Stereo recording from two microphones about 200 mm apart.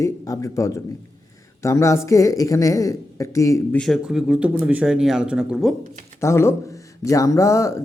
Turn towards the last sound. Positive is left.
turn(degrees=15)  # may be behind; listen again after turning